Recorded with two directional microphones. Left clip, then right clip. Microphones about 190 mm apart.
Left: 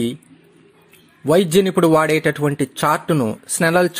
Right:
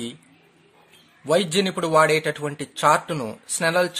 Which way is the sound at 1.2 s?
30° left (ahead or behind).